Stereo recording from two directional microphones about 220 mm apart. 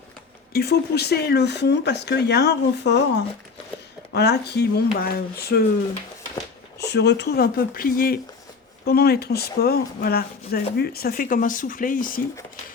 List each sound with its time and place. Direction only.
0.5 s speech: 45° left (ahead or behind)
6.7 s speech: 50° left (ahead or behind)